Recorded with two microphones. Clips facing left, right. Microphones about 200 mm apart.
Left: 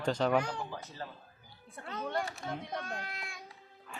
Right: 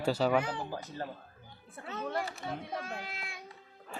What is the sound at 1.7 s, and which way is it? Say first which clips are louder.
A child's voice: even; 5° right (ahead or behind).